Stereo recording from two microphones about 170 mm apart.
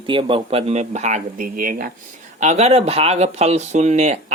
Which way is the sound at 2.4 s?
40° right (ahead or behind).